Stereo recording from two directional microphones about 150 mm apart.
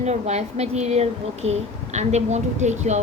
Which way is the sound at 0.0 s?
50° right (ahead or behind).